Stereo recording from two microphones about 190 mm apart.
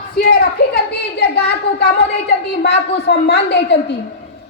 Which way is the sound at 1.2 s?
60° left (ahead or behind).